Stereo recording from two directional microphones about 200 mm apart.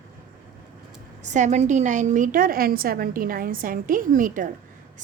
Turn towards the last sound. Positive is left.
turn(degrees=-40)  # may be behind; listen again after turning